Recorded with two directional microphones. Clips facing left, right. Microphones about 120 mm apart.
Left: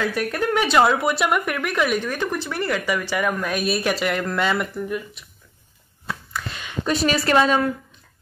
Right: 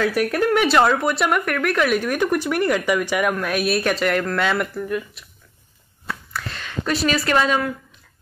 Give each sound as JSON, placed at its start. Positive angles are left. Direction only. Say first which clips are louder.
{"t": 0.1, "sound": "speech", "louder": "right 4 dB", "side_deg": -5}
{"t": 2.0, "sound": "speech", "louder": "right 5 dB", "side_deg": -10}
{"t": 6.3, "sound": "a sound", "louder": "even", "side_deg": 5}
{"t": 6.9, "sound": "a woman's voice", "louder": "left 1 dB", "side_deg": 25}